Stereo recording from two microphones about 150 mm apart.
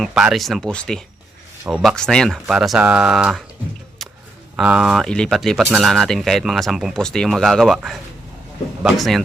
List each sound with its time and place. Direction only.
0.0 s speech: 5° right (ahead or behind)
4.5 s speech: 5° right (ahead or behind)